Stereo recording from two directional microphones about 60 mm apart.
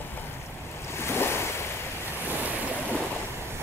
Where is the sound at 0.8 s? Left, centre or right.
Left.